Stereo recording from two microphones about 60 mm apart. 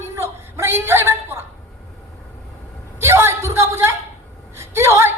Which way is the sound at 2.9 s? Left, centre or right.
Right.